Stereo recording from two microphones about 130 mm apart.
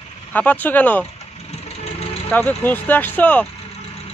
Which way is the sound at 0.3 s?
15° left (ahead or behind).